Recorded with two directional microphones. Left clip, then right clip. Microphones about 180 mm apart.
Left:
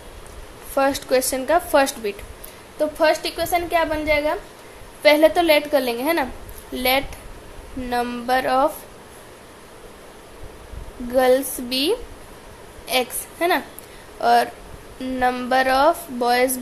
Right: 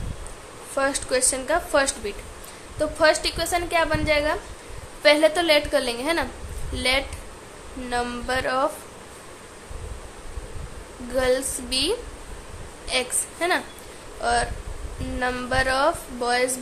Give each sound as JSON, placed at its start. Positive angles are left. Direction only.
{"t": 0.7, "sound": "a woman's voice", "side_deg": 25}
{"t": 11.1, "sound": "a woman's voice", "side_deg": 30}